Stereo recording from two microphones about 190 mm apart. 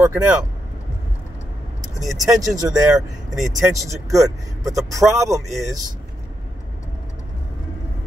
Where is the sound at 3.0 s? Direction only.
Centre (ahead or behind).